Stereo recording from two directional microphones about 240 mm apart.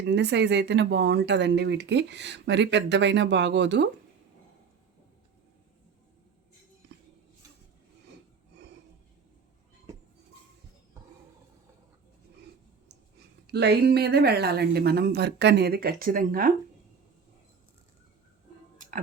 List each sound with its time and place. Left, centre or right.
0.0 s speech: right
13.5 s speech: right